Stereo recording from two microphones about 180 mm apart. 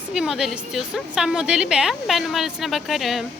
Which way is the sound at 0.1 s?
5° right (ahead or behind).